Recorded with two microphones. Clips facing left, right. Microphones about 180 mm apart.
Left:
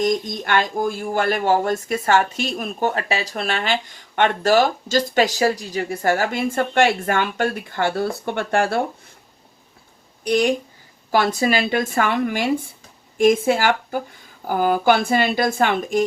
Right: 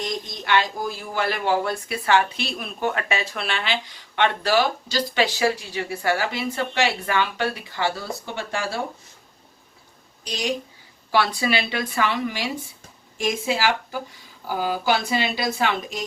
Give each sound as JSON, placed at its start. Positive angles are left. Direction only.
{"t": 0.0, "sound": "speech", "side_deg": 50}
{"t": 10.2, "sound": "speech", "side_deg": 55}